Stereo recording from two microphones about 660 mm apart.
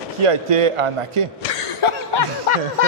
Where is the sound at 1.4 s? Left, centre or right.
Left.